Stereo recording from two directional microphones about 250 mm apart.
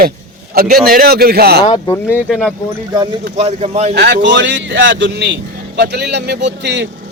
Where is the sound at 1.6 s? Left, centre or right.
Left.